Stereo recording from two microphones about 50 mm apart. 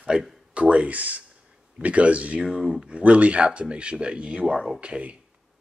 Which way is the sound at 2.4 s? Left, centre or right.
Centre.